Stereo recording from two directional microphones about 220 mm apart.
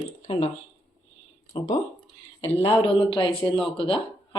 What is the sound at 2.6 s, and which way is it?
Speech, 25° left (ahead or behind).